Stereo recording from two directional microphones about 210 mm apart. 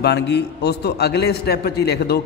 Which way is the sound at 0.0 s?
55° left (ahead or behind).